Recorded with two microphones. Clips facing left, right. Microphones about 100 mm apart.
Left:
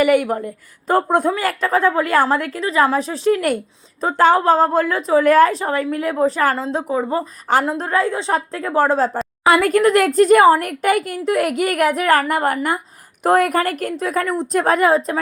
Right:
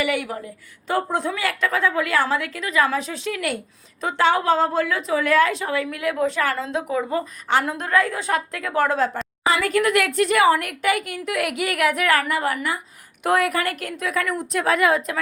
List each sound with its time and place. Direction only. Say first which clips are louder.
0.0 s a woman's voice: left 9 dB; 50° left (ahead or behind)
1.3 s a woman's voice: left 5 dB; 40° left (ahead or behind)
9.4 s a woman's voice: left 6 dB; 50° left (ahead or behind); by 15.2 s 30° left (ahead or behind)